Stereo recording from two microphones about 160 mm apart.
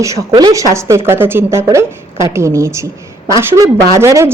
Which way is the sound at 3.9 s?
15° right (ahead or behind).